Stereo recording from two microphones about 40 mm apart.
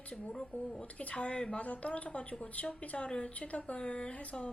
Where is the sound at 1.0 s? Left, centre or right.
Left.